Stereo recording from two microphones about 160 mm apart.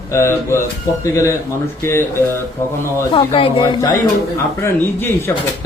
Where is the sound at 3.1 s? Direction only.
35° left (ahead or behind).